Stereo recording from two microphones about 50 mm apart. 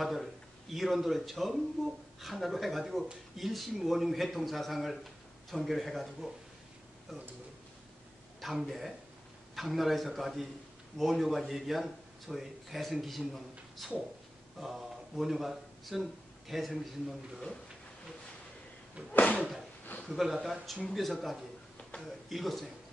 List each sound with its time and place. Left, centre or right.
0.0 s a man's voice: centre
8.4 s a man's voice: centre
19.1 s a sound: left
20.1 s a man's voice: centre